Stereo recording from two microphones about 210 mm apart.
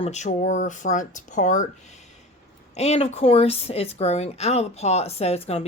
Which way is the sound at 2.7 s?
30° left (ahead or behind).